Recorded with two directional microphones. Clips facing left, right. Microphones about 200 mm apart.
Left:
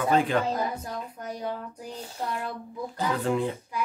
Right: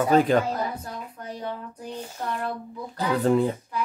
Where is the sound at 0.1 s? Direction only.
40° right (ahead or behind).